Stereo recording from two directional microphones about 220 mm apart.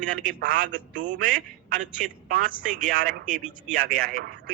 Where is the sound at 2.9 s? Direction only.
45° right (ahead or behind).